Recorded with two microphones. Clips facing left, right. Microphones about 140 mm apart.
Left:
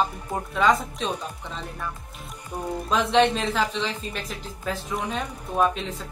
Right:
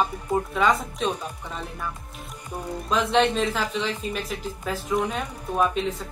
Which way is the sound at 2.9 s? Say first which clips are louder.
Left 1 dB; centre (ahead or behind).